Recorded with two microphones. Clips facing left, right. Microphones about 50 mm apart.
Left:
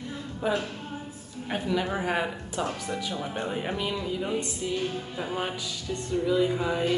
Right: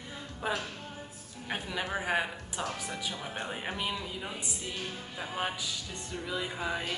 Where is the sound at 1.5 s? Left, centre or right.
Centre.